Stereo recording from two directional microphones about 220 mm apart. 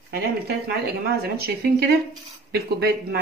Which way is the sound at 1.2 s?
45° right (ahead or behind).